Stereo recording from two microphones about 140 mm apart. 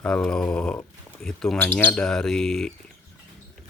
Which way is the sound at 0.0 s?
10° left (ahead or behind).